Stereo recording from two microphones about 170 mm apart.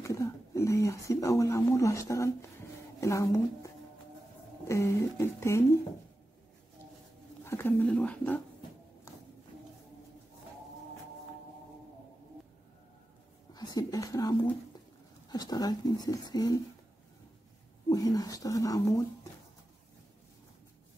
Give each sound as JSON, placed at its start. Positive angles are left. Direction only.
{"t": 0.0, "sound": "a woman's voice", "side_deg": 20}
{"t": 4.6, "sound": "speech", "side_deg": 15}
{"t": 7.4, "sound": "speech", "side_deg": 15}
{"t": 13.6, "sound": "speech", "side_deg": 25}
{"t": 17.8, "sound": "speech", "side_deg": 20}